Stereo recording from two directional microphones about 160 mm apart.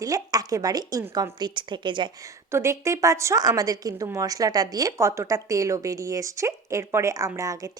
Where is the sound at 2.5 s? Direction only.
15° right (ahead or behind).